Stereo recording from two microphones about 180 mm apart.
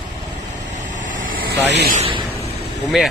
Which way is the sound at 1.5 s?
65° right (ahead or behind).